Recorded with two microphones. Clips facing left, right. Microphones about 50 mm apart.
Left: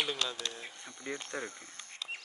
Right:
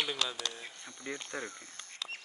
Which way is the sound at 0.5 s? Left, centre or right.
Centre.